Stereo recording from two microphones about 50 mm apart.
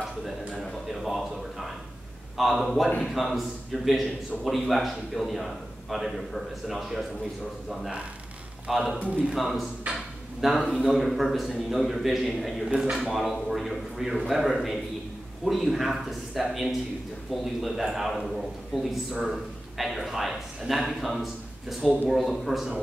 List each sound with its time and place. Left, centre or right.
0.8 s a sound: centre
2.3 s a man's voice: centre
8.6 s a man's voice: centre
10.7 s a man's voice: centre
12.6 s a man's voice: centre
12.9 s a man's voice: centre